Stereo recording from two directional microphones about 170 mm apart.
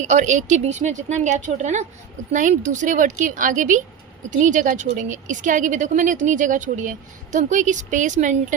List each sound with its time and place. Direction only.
0.0 s a woman's voice: 45° right (ahead or behind)